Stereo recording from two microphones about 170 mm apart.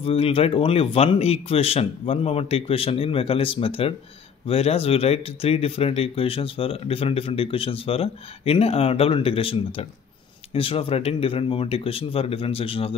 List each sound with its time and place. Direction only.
0.0 s speech: 35° left (ahead or behind)